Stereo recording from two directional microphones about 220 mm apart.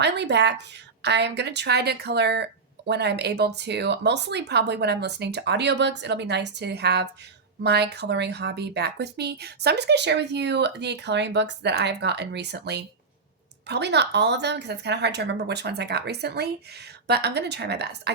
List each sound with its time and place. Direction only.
0.0 s speech: 50° right (ahead or behind)